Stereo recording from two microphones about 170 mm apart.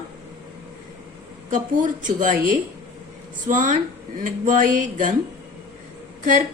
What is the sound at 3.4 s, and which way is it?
Speech, 50° right (ahead or behind).